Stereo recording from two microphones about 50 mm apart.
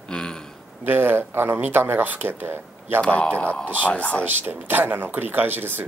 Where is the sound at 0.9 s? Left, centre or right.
Right.